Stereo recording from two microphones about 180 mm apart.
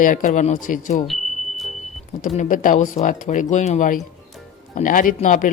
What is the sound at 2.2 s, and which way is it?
Speech, 45° left (ahead or behind).